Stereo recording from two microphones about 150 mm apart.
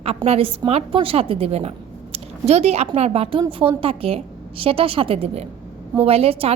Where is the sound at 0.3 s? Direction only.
40° right (ahead or behind).